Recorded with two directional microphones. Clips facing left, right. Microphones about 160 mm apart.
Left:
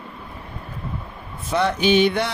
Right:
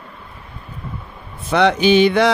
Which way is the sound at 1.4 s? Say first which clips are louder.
Right 5 dB; 85° right.